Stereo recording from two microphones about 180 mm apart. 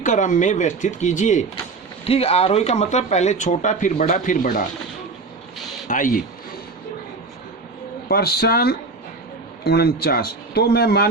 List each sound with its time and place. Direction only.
0.0 s speech: 45° left (ahead or behind)
5.9 s speech: 50° left (ahead or behind)
8.0 s speech: 60° left (ahead or behind)